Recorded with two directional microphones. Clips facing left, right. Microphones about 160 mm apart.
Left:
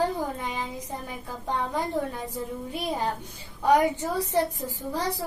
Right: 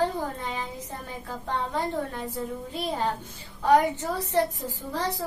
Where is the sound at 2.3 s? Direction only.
10° left (ahead or behind).